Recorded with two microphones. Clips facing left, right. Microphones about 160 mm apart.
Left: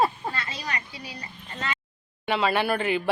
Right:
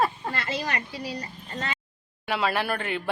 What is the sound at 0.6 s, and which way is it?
A woman's voice, 45° right (ahead or behind).